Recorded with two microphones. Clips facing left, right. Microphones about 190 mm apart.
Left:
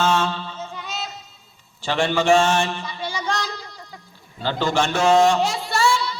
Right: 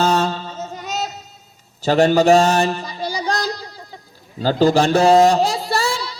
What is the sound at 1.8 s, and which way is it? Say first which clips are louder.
Mantra: right 7 dB; 40° right (ahead or behind).